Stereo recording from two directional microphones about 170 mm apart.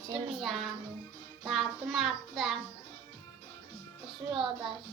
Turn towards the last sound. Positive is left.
turn(degrees=0)  # may be behind; listen again after turning